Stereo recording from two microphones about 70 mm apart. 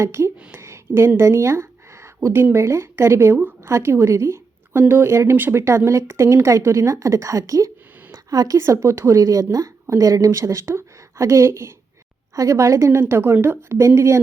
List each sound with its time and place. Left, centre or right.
0.0 s a woman's voice: right